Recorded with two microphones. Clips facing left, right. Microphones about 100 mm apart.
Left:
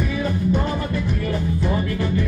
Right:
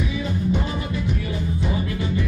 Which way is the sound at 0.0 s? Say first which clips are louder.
Left 3 dB; 55° left (ahead or behind).